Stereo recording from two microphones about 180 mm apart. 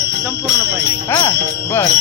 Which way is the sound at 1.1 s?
15° left (ahead or behind).